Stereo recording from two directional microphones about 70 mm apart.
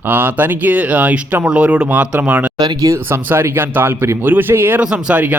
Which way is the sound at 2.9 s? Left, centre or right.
Right.